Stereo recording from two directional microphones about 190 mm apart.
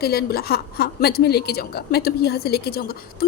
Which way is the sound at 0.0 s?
55° left (ahead or behind).